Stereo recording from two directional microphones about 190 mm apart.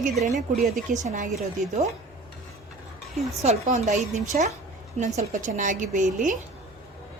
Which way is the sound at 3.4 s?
35° right (ahead or behind).